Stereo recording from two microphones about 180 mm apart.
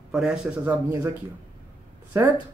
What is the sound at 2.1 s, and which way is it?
Speech, 15° right (ahead or behind).